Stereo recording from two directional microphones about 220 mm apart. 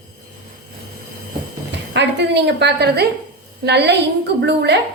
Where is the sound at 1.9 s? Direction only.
50° right (ahead or behind).